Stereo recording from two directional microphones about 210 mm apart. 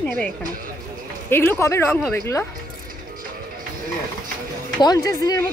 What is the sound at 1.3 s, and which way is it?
Speech, 10° left (ahead or behind).